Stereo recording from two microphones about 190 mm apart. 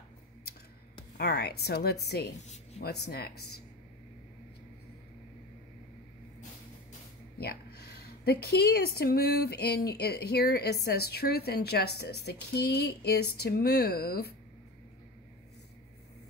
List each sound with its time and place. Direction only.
1.1 s a woman's voice: 55° left (ahead or behind)
2.4 s speech: 35° left (ahead or behind)
2.8 s a woman's voice: 55° left (ahead or behind)
7.3 s a woman's voice: 55° left (ahead or behind)